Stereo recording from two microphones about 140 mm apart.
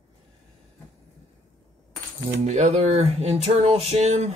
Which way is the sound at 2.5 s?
55° right (ahead or behind).